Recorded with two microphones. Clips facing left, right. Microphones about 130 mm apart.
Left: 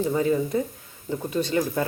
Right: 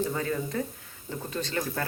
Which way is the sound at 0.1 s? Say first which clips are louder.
Left 8 dB; 15° left (ahead or behind).